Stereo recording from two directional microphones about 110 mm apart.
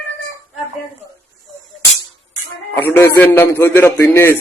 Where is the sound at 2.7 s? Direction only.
20° left (ahead or behind).